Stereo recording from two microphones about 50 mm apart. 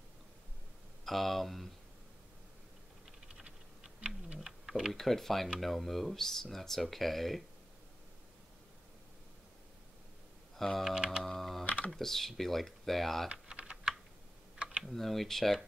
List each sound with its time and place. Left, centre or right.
1.0 s speech: centre
3.4 s typing: right
4.4 s typing: centre
4.9 s speech: centre
10.5 s computer keyboard: centre
11.2 s typing: centre
11.6 s computer keyboard: left
11.9 s speech: centre
13.3 s typing: centre
14.8 s speech: centre